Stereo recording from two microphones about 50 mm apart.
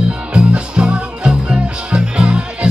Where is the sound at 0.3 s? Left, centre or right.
Right.